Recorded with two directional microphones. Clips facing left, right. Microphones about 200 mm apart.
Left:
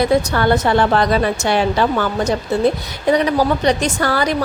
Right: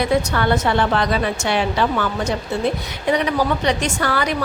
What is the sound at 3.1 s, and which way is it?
A woman's voice, 40° left (ahead or behind).